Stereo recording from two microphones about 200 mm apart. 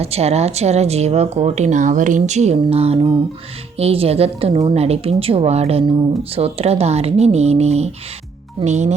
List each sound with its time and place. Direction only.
0.0 s speech: 30° right (ahead or behind)